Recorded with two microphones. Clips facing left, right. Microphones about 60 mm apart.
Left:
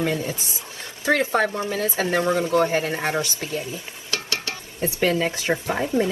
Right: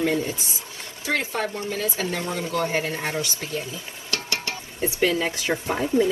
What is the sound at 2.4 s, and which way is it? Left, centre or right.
Speech, left.